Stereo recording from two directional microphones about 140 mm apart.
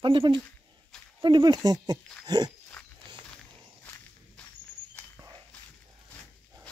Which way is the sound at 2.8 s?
5° left (ahead or behind).